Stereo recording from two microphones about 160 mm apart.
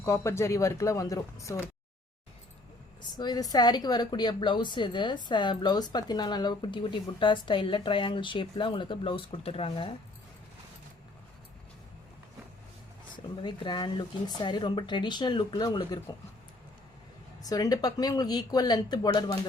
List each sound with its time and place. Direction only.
0.0 s a woman's voice: 15° left (ahead or behind)
3.0 s a woman's voice: 25° left (ahead or behind)
13.1 s a woman's voice: 30° left (ahead or behind)
17.5 s a woman's voice: 20° left (ahead or behind)